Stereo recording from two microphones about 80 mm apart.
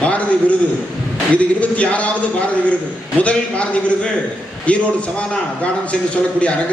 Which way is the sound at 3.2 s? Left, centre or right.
Centre.